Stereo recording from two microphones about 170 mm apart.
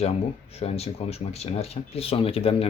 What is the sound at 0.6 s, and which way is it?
Speech, 40° left (ahead or behind).